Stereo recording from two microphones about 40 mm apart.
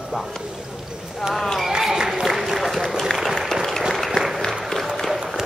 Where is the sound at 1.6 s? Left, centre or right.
Centre.